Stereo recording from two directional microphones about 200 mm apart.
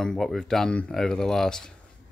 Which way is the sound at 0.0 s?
Centre (ahead or behind).